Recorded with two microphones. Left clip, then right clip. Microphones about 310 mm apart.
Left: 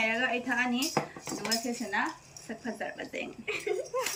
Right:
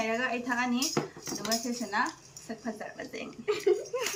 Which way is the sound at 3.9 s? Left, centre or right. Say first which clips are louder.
Left 1 dB; centre.